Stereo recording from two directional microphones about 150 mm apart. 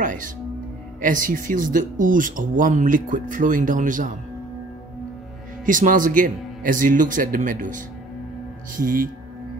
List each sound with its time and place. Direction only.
0.0 s music: 60° right (ahead or behind)
1.0 s speech: 65° right (ahead or behind)
5.7 s speech: 65° right (ahead or behind)